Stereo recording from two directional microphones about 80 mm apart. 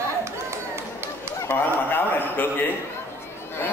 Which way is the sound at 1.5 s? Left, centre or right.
Left.